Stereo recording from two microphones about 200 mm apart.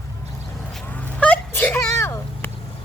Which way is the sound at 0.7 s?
10° left (ahead or behind).